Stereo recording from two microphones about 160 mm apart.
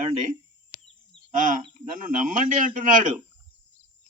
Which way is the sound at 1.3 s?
55° right (ahead or behind).